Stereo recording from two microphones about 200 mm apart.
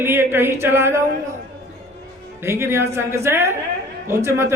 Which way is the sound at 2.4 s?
10° right (ahead or behind).